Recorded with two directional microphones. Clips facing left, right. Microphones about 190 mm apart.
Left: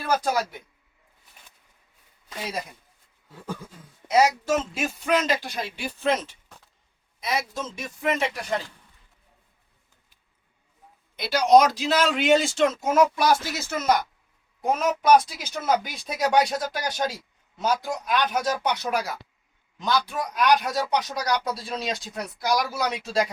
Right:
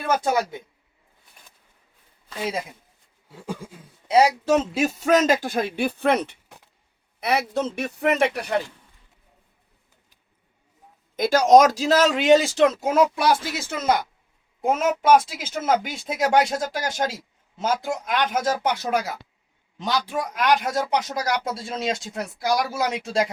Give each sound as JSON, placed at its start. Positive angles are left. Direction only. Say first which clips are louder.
{"t": 0.1, "sound": "speech", "louder": "right 2 dB", "side_deg": -25}
{"t": 3.4, "sound": "a sound", "louder": "right 2 dB", "side_deg": -10}
{"t": 4.1, "sound": "a man's voice", "louder": "right 3 dB", "side_deg": -35}
{"t": 11.2, "sound": "a man's voice", "louder": "right 3 dB", "side_deg": -45}
{"t": 12.8, "sound": "speech", "louder": "right 1 dB", "side_deg": -30}